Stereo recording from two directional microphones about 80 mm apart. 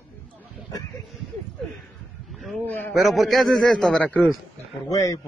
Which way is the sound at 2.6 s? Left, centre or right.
Left.